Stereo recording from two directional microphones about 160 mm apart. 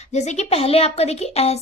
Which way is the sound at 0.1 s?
45° left (ahead or behind).